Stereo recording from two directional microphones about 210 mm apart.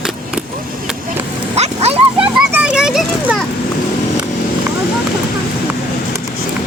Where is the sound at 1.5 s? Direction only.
30° right (ahead or behind).